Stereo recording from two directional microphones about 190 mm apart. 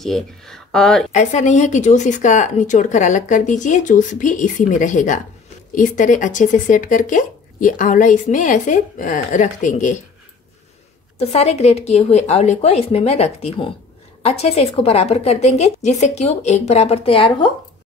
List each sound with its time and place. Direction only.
0.0 s speech: centre (ahead or behind)
1.1 s speech: 40° left (ahead or behind)
11.1 s speech: 35° left (ahead or behind)